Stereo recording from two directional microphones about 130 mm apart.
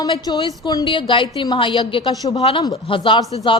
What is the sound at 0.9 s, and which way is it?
A woman's voice, 40° left (ahead or behind).